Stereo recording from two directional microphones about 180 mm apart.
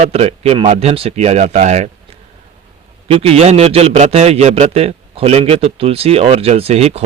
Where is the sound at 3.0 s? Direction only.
35° right (ahead or behind).